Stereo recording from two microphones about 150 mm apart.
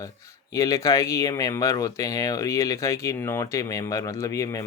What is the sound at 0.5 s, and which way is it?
Speech, 20° left (ahead or behind).